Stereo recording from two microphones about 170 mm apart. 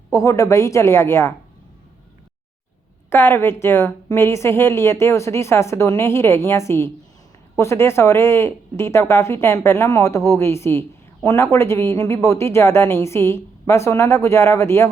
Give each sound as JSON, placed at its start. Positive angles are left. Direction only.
{"t": 0.1, "sound": "a woman's voice", "side_deg": 20}
{"t": 3.1, "sound": "a woman's voice", "side_deg": 15}